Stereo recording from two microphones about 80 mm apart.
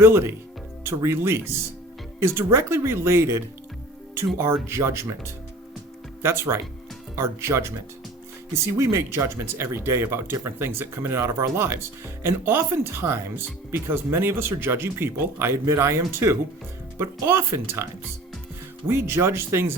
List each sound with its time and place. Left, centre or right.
0.0 s speech: right
4.6 s speech: right
6.2 s speech: right
18.9 s speech: right